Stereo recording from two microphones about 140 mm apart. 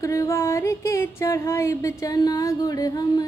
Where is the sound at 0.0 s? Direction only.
20° left (ahead or behind).